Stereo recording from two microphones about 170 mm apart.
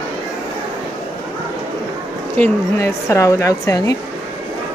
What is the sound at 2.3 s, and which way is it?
A woman's voice, 15° left (ahead or behind).